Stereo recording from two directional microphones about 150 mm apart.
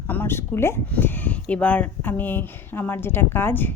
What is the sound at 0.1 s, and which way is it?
A woman's voice, 15° left (ahead or behind).